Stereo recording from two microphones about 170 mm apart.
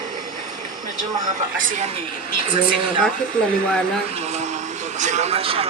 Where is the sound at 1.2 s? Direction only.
50° right (ahead or behind).